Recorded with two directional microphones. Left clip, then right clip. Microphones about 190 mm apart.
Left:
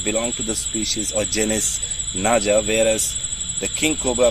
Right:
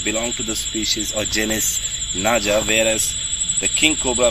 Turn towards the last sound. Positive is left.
turn(degrees=55)  # may be behind; listen again after turning